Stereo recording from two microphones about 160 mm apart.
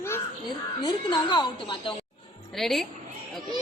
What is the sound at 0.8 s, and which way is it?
A woman's voice, 30° left (ahead or behind).